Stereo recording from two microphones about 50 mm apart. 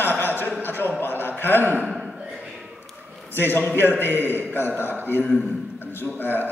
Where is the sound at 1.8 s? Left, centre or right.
Centre.